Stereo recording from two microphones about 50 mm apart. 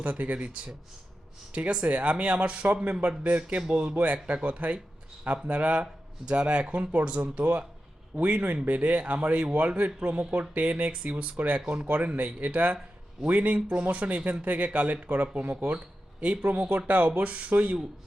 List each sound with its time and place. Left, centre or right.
0.0 s speech: right